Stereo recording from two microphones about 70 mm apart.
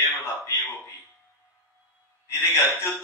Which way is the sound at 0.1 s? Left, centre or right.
Left.